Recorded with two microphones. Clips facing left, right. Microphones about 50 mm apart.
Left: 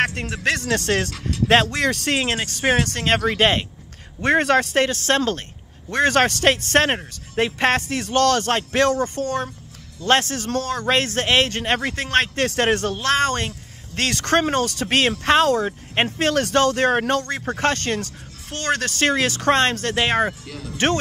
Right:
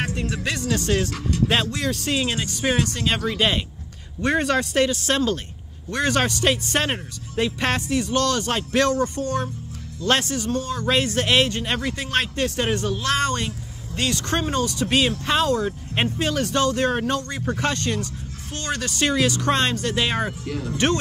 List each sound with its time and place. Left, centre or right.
0.2 s speech: left
1.7 s speech: left
2.1 s speech: left
6.9 s speech: left
10.5 s speech: left
10.9 s speech: left
12.4 s speech: left
12.9 s speech: left
13.9 s speech: left
16.2 s speech: left
16.5 s speech: left
20.4 s speech: centre
20.7 s speech: left